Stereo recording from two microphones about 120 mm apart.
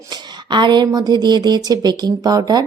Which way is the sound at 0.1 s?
40° right (ahead or behind).